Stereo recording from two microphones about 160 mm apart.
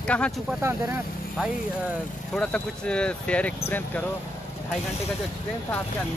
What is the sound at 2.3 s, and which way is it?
Speech, 5° left (ahead or behind).